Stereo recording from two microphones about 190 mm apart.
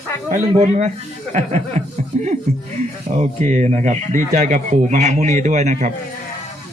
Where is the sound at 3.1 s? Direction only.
35° right (ahead or behind).